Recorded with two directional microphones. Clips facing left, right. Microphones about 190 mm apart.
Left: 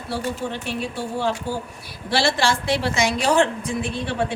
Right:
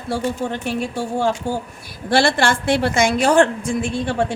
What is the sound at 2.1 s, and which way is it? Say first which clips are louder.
A woman's voice: right 4 dB; 50° right (ahead or behind).